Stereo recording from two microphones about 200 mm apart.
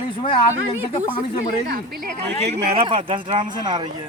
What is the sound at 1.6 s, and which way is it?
Speech, 45° right (ahead or behind).